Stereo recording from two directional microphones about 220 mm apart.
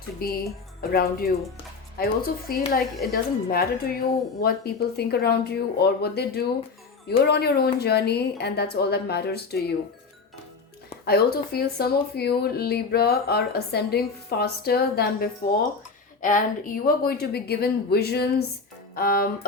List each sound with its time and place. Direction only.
0.2 s speech: 45° left (ahead or behind)
11.0 s speech: 45° left (ahead or behind)